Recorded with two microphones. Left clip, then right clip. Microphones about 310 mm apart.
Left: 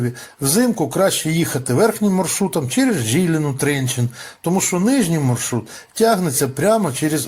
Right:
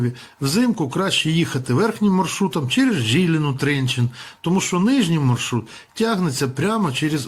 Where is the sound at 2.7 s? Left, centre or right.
Centre.